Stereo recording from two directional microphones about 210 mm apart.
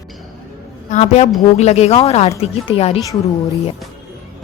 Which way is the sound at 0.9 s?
35° left (ahead or behind).